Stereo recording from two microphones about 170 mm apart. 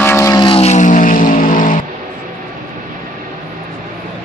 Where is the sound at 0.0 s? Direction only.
15° left (ahead or behind).